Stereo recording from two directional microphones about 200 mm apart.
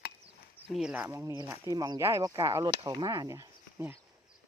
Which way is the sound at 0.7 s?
5° right (ahead or behind).